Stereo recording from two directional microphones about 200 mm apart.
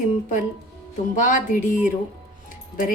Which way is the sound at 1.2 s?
40° left (ahead or behind).